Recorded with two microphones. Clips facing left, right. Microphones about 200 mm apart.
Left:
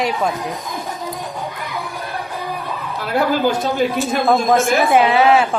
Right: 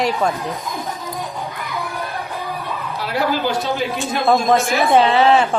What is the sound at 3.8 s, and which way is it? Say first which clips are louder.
Speech: left 4 dB; centre (ahead or behind).